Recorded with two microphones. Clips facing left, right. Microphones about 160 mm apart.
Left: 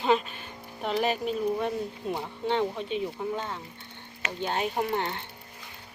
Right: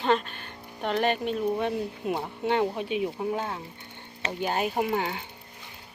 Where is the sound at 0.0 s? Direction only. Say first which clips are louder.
Even; 5° left (ahead or behind).